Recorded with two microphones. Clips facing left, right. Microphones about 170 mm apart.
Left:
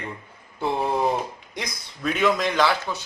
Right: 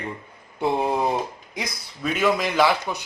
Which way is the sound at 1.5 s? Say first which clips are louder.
Right 1 dB; centre (ahead or behind).